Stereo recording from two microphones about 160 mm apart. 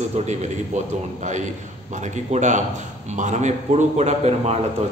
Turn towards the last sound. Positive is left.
turn(degrees=-40)  # may be behind; listen again after turning